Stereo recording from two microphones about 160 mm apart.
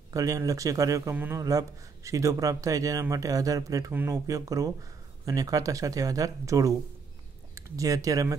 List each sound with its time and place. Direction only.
0.1 s a man's voice: 20° right (ahead or behind)